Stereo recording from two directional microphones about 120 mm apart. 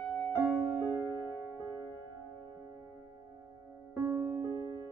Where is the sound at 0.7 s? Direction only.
20° right (ahead or behind).